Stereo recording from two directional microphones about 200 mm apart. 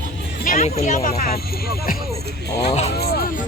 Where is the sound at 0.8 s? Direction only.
40° left (ahead or behind).